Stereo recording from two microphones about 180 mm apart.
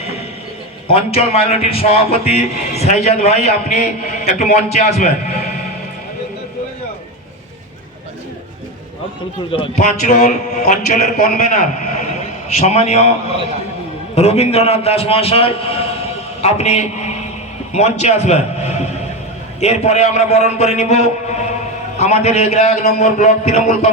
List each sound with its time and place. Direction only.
0.9 s speech: 35° left (ahead or behind)
9.5 s speech: 30° left (ahead or behind)
9.8 s a man's voice: 40° left (ahead or behind)
14.2 s a man's voice: 35° left (ahead or behind)